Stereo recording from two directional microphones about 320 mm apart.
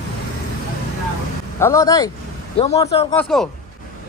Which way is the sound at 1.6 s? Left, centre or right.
Centre.